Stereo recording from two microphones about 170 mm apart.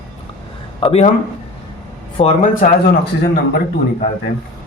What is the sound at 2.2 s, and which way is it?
Speech, 40° left (ahead or behind).